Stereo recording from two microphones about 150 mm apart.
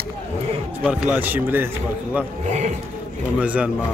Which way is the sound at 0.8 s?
5° right (ahead or behind).